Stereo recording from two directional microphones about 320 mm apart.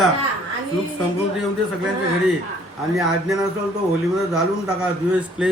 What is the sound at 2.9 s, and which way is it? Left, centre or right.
Speech, centre.